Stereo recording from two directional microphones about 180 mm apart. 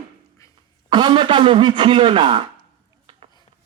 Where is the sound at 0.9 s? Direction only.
25° right (ahead or behind).